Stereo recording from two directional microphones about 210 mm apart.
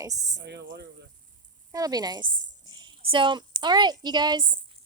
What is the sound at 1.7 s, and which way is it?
A woman's voice, 20° right (ahead or behind).